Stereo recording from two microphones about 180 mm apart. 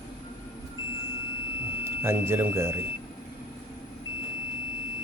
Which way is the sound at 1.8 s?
15° right (ahead or behind).